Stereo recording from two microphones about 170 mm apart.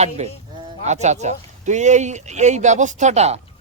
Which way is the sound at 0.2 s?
40° right (ahead or behind).